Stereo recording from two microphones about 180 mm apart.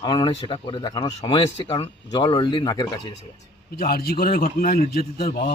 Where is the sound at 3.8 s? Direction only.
55° left (ahead or behind).